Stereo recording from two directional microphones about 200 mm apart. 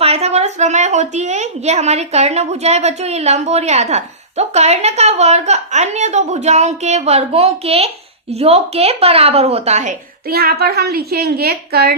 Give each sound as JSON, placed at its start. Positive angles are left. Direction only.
{"t": 0.0, "sound": "a woman's voice", "side_deg": -30}
{"t": 10.2, "sound": "a woman's voice", "side_deg": -50}